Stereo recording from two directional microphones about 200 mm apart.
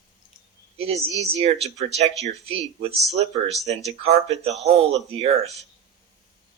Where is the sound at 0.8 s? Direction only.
30° right (ahead or behind).